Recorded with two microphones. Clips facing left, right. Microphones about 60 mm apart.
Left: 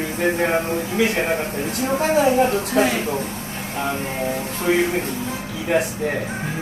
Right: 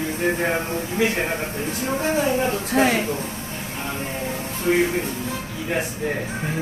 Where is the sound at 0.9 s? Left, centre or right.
Left.